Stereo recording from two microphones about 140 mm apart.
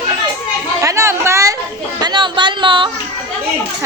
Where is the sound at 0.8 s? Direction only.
20° right (ahead or behind).